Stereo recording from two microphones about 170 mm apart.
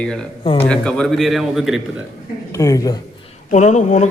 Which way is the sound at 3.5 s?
45° left (ahead or behind).